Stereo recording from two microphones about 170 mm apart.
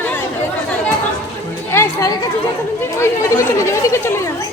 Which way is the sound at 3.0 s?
15° left (ahead or behind).